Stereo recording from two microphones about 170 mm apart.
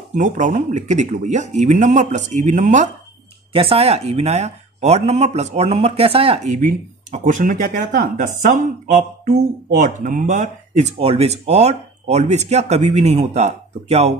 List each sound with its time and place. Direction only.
0.1 s speech: 45° right (ahead or behind)
3.5 s speech: 35° right (ahead or behind)
11.0 s speech: 35° right (ahead or behind)